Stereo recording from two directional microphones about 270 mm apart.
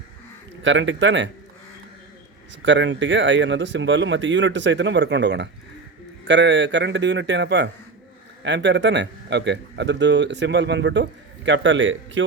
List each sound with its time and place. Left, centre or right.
0.6 s a man's voice: right
2.6 s speech: right